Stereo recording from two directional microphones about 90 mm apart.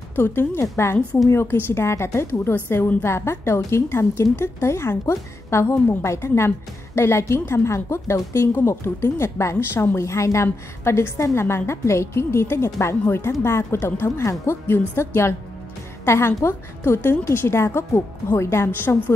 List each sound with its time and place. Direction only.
0.1 s a woman's voice: 25° left (ahead or behind)